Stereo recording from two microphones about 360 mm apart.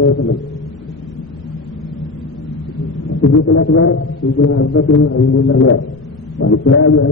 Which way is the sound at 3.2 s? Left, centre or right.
Left.